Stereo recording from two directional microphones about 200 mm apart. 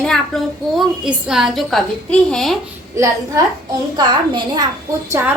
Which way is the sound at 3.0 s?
15° right (ahead or behind).